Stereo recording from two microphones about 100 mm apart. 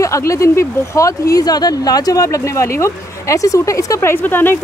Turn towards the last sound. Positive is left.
turn(degrees=20)  # may be behind; listen again after turning